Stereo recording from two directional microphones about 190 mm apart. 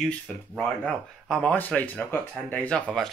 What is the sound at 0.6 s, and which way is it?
Speech, 5° left (ahead or behind).